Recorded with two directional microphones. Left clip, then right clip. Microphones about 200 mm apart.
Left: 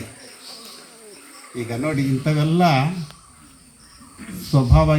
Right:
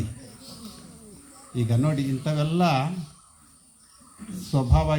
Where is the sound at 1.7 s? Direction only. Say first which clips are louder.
Left 5 dB; 35° left (ahead or behind).